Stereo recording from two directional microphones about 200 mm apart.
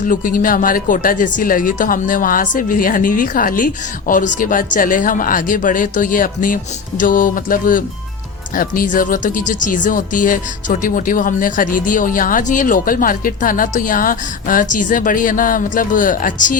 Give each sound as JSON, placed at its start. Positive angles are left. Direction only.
{"t": 0.0, "sound": "speech", "side_deg": 45}